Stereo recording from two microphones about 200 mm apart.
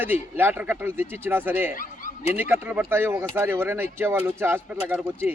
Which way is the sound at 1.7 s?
45° left (ahead or behind).